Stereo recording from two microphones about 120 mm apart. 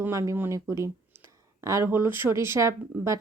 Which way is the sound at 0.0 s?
25° right (ahead or behind).